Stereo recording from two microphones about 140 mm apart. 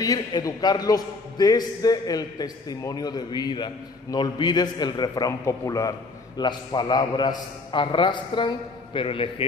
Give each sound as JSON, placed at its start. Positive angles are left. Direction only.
{"t": 0.0, "sound": "a man's voice", "side_deg": 25}